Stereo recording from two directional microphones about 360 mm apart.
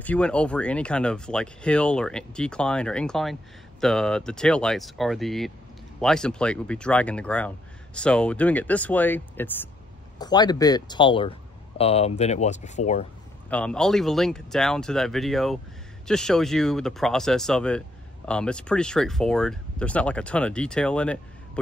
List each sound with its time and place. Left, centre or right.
0.0 s speech: centre
13.5 s speech: centre